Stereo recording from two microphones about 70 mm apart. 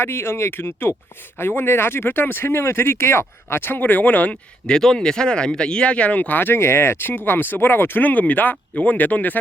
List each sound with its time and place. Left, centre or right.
0.0 s speech: left
4.6 s speech: centre